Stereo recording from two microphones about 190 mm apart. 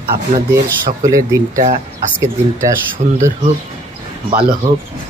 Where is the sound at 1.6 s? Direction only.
40° right (ahead or behind).